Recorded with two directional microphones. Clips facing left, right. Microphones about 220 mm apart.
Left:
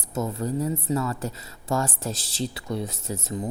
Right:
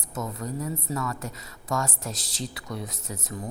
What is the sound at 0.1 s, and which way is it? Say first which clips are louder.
Speech: left 5 dB; 30° left (ahead or behind).